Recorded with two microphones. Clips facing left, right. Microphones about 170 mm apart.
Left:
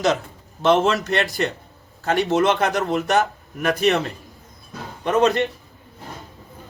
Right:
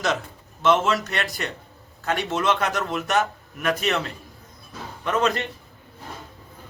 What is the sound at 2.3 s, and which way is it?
Speech, 30° left (ahead or behind).